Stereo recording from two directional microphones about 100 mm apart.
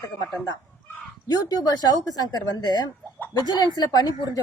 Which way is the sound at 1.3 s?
40° left (ahead or behind).